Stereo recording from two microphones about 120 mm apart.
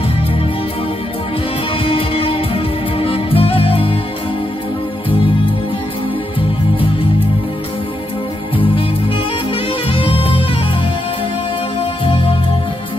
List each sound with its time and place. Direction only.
1.9 s music: 50° left (ahead or behind)
9.9 s music: 50° left (ahead or behind)
11.8 s music: 50° left (ahead or behind)